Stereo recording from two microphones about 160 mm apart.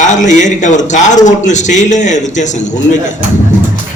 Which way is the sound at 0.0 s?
50° left (ahead or behind).